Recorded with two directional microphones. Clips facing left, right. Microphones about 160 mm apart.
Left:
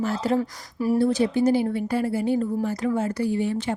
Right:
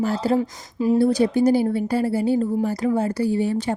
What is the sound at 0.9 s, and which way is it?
Speech, 40° right (ahead or behind).